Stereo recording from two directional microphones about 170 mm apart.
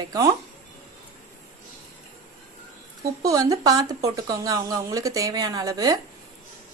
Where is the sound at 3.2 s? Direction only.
20° right (ahead or behind).